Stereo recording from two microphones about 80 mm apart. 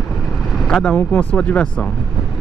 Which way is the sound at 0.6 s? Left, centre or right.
Centre.